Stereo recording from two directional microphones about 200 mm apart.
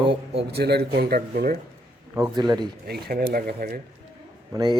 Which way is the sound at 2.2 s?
15° right (ahead or behind).